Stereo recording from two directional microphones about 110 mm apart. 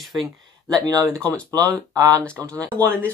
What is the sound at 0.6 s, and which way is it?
Speech, 35° right (ahead or behind).